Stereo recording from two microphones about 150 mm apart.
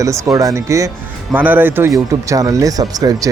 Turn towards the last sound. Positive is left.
turn(degrees=-25)  # may be behind; listen again after turning